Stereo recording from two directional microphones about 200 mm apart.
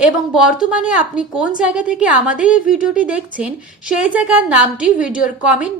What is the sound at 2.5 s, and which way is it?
Speech, 40° left (ahead or behind).